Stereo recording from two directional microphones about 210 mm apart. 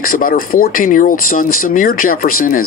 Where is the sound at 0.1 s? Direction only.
45° left (ahead or behind).